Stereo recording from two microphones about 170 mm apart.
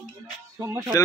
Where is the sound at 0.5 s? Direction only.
20° right (ahead or behind).